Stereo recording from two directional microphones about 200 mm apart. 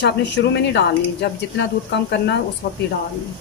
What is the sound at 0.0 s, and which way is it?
Speech, 60° left (ahead or behind).